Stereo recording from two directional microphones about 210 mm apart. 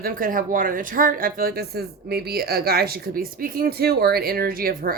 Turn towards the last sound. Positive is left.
turn(degrees=-45)  # may be behind; listen again after turning